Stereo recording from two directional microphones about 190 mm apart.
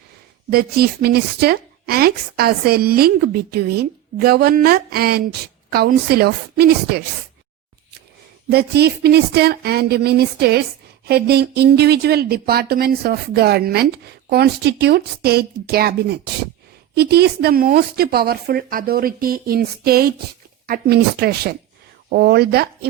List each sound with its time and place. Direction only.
0.5 s a woman's voice: 55° right (ahead or behind)
8.4 s a woman's voice: 60° right (ahead or behind)